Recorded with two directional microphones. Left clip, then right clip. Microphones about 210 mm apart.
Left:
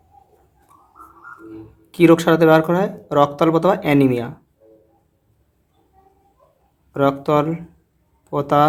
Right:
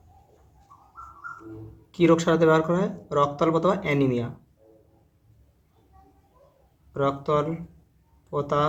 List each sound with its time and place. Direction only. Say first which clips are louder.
1.9 s speech: left 7 dB; 40° left (ahead or behind)
6.9 s speech: left 7 dB; 45° left (ahead or behind)